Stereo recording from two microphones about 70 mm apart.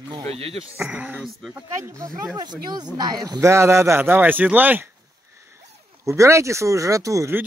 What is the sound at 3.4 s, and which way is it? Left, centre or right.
Speech, right.